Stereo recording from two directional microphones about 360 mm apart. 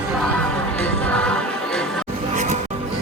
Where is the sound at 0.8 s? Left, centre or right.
Centre.